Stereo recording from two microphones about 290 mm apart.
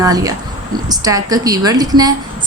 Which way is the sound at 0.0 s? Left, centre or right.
Centre.